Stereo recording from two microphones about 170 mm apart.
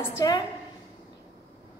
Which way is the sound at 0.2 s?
20° left (ahead or behind).